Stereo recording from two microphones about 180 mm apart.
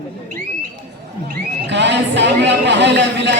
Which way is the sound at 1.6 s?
75° right (ahead or behind).